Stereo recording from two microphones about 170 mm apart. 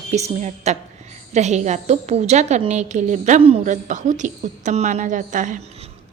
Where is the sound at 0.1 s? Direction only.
40° right (ahead or behind).